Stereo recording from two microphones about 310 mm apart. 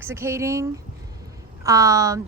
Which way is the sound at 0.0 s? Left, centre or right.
Centre.